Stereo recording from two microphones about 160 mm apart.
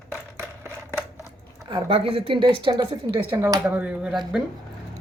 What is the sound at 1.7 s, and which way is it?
A woman's voice, 35° right (ahead or behind).